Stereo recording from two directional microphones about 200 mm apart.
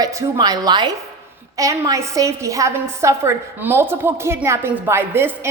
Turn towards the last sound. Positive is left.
turn(degrees=-10)  # may be behind; listen again after turning